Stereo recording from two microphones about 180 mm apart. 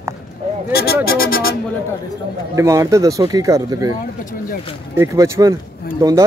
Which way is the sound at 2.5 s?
15° right (ahead or behind).